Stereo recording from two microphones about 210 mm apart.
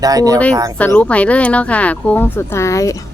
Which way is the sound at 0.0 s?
15° right (ahead or behind).